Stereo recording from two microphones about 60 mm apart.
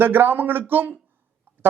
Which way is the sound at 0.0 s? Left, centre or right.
Right.